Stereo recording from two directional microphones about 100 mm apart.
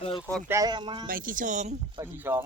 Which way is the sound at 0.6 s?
45° right (ahead or behind).